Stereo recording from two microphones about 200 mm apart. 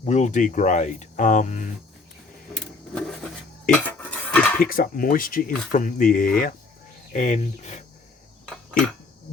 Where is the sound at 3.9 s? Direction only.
5° left (ahead or behind).